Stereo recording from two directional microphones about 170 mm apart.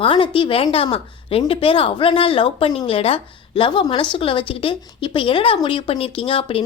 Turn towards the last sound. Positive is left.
turn(degrees=35)  # may be behind; listen again after turning